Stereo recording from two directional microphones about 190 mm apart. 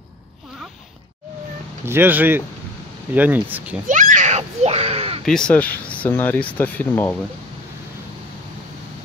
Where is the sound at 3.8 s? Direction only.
40° right (ahead or behind).